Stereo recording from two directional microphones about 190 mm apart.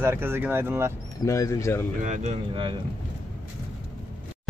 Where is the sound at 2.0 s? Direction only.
35° right (ahead or behind).